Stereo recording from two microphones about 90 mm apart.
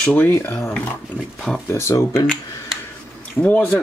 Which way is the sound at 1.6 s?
30° left (ahead or behind).